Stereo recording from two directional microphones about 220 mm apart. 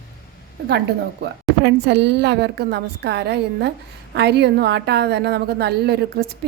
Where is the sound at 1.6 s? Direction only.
50° right (ahead or behind).